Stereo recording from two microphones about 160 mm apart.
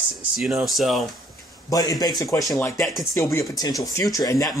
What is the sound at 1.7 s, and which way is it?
Speech, 20° left (ahead or behind).